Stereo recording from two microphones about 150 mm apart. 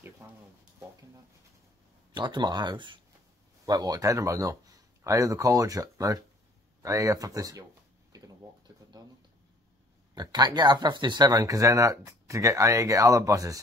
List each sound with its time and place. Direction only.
0.2 s a sound: 15° right (ahead or behind)
2.1 s speech: 30° right (ahead or behind)
10.1 s speech: 25° right (ahead or behind)